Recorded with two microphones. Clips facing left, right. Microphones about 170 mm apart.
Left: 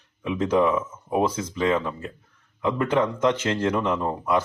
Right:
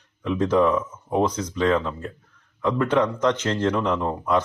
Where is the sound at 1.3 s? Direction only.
20° left (ahead or behind).